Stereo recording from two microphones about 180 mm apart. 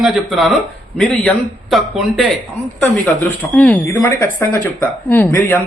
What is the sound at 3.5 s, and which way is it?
Speech, 10° left (ahead or behind).